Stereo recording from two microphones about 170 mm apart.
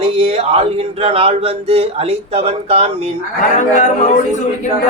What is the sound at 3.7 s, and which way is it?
Speech, 45° left (ahead or behind).